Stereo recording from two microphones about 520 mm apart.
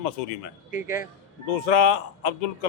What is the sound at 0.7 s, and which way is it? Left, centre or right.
Speech, centre.